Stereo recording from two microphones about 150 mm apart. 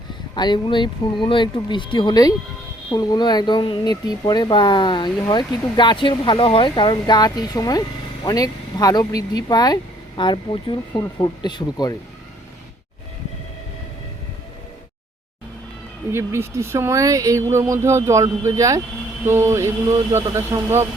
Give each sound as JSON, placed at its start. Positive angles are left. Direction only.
{"t": 0.3, "sound": "speech", "side_deg": 30}
{"t": 16.1, "sound": "speech", "side_deg": -15}
{"t": 19.2, "sound": "a sound", "side_deg": -15}